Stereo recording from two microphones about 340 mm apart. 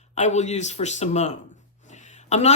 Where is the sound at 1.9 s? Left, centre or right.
Left.